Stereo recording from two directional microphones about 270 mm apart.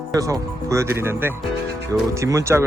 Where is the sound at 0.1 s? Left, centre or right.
Centre.